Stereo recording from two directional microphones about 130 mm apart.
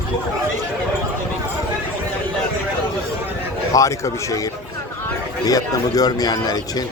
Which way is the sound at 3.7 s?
25° left (ahead or behind).